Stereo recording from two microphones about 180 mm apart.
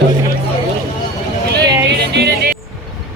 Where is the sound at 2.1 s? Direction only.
65° right (ahead or behind).